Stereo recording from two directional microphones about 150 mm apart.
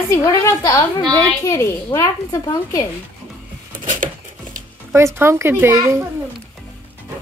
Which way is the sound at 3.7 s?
65° right (ahead or behind).